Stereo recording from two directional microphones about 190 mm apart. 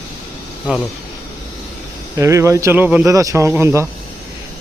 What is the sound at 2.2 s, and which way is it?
A man's voice, 15° right (ahead or behind).